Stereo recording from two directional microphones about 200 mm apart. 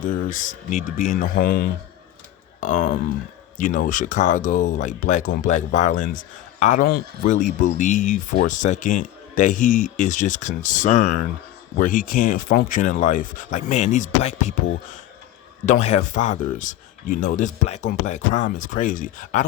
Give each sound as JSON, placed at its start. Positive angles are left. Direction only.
{"t": 0.0, "sound": "speech", "side_deg": 40}
{"t": 15.6, "sound": "speech", "side_deg": 35}